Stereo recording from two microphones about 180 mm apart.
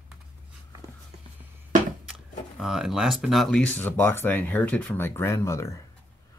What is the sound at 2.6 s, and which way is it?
Speech, 5° right (ahead or behind).